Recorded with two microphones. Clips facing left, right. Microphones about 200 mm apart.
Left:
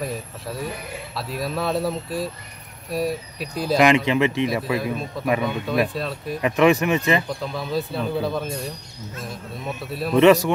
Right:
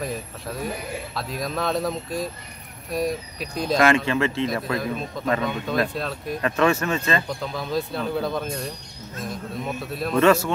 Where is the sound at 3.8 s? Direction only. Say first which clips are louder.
Left 3 dB; 15° left (ahead or behind).